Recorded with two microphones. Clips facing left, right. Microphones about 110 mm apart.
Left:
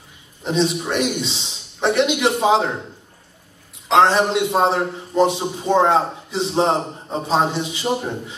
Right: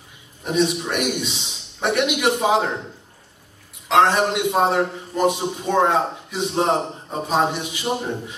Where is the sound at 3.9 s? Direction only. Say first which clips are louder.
Left 2 dB; 25° left (ahead or behind).